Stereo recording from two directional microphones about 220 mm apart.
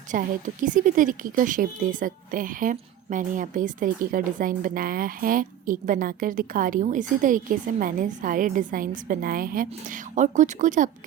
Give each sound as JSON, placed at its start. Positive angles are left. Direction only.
{"t": 0.1, "sound": "a woman's voice", "side_deg": -35}